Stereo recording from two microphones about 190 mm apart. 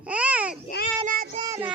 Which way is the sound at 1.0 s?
50° right (ahead or behind).